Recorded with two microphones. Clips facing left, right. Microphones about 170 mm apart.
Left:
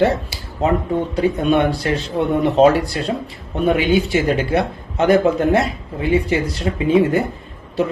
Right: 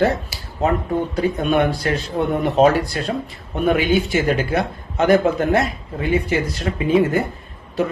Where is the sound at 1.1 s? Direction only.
30° left (ahead or behind).